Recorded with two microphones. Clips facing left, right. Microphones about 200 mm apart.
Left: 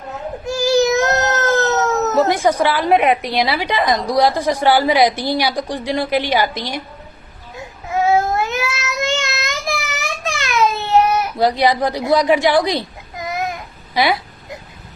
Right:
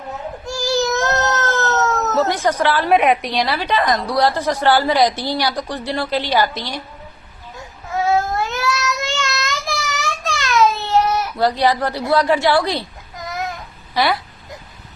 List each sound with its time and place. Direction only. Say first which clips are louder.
0.4 s a sound: left 5 dB; 20° left (ahead or behind)
3.2 s a woman's voice: left 2 dB; 10° left (ahead or behind)
8.0 s child singing: left 2 dB; 20° left (ahead or behind)